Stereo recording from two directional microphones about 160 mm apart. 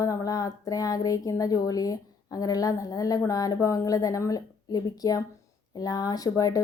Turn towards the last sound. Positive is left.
turn(degrees=20)  # may be behind; listen again after turning